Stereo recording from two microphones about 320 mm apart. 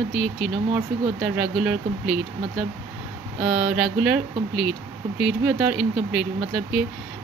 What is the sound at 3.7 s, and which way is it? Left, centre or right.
Speech, centre.